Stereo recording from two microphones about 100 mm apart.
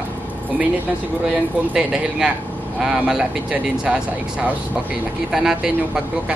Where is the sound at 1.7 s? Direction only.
5° right (ahead or behind).